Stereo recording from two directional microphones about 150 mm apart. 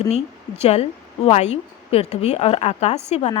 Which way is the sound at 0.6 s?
45° left (ahead or behind).